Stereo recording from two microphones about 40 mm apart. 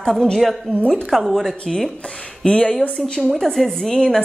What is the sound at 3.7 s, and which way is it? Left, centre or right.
Speech, centre.